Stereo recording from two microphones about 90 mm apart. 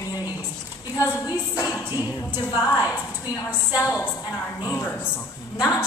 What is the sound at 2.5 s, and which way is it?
Speech, 35° left (ahead or behind).